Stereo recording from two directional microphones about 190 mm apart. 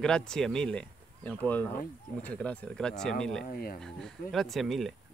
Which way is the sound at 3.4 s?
50° left (ahead or behind).